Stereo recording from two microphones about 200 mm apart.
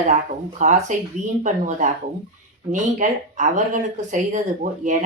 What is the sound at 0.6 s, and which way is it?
Speech, 40° right (ahead or behind).